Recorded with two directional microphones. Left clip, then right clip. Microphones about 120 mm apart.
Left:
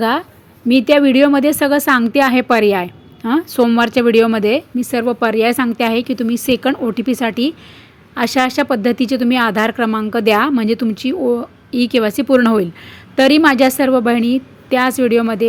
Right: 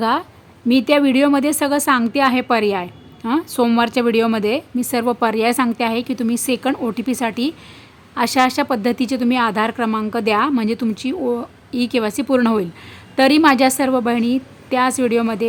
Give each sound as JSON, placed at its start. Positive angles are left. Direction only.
{"t": 0.0, "sound": "speech", "side_deg": 15}
{"t": 4.9, "sound": "speech", "side_deg": 5}